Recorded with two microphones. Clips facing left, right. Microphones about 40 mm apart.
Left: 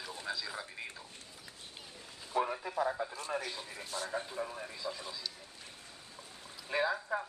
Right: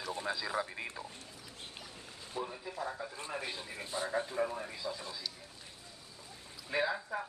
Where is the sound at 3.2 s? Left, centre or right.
Right.